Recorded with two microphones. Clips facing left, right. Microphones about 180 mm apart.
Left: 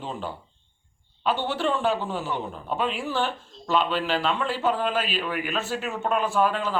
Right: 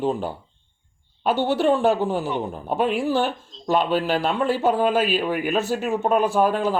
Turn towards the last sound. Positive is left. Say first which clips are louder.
# right 4 dB
turn(degrees=-45)  # may be behind; listen again after turning